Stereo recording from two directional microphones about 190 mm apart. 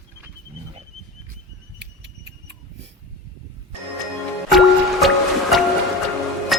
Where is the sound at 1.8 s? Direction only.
65° right (ahead or behind).